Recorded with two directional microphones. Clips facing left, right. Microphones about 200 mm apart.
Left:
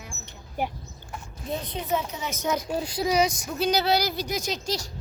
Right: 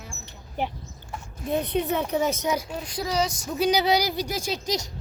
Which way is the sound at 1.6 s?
65° right (ahead or behind).